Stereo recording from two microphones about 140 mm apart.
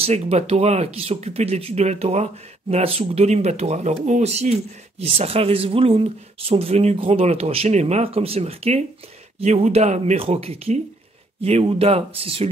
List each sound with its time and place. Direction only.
0.0 s speech: 50° right (ahead or behind)